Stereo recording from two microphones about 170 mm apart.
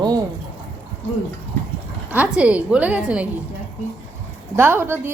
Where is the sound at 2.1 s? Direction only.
10° right (ahead or behind).